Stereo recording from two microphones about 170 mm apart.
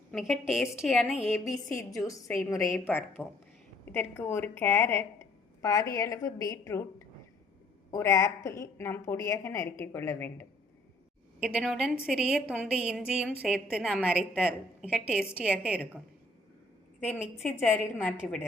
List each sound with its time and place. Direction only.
0.1 s a woman's voice: centre (ahead or behind)
1.3 s a woman's voice: 20° left (ahead or behind)
7.9 s a woman's voice: 15° left (ahead or behind)
11.3 s a woman's voice: 5° right (ahead or behind)
17.1 s a woman's voice: 10° left (ahead or behind)